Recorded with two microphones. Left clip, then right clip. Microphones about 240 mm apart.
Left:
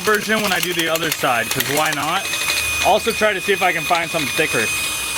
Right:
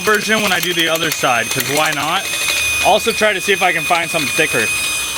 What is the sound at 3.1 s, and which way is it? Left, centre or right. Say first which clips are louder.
Speech: right 3 dB; centre.